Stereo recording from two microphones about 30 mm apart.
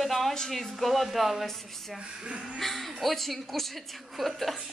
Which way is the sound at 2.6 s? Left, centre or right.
Centre.